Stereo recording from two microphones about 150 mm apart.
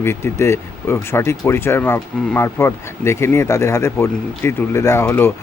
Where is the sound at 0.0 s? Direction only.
15° left (ahead or behind).